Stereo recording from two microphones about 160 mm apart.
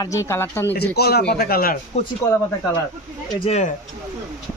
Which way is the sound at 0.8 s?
85° left.